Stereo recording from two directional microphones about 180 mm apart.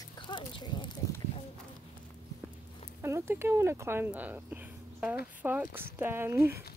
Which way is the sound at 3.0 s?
15° right (ahead or behind).